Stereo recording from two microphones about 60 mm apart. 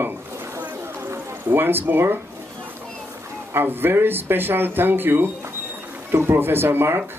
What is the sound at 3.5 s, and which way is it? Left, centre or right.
Speech, right.